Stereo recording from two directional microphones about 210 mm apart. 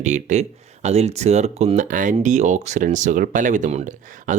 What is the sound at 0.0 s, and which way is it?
Speech, 35° right (ahead or behind).